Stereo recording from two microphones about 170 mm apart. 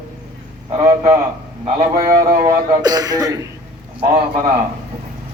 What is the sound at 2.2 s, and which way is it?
Speech, 20° right (ahead or behind).